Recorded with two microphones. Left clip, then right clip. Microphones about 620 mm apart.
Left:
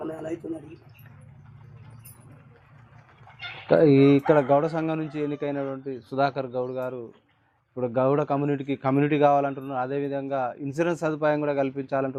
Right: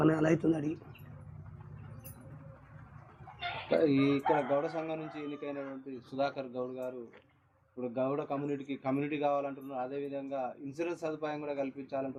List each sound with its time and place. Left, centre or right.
0.4 s speech: right
3.8 s a man's voice: left